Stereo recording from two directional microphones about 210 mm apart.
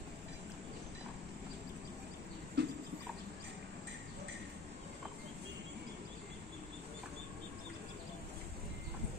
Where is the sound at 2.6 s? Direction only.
55° right (ahead or behind).